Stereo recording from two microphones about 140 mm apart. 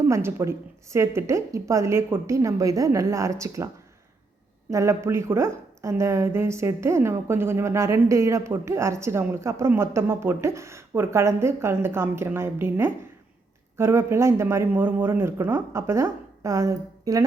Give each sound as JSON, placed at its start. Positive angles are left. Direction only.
{"t": 0.0, "sound": "speech", "side_deg": -20}
{"t": 4.7, "sound": "speech", "side_deg": -20}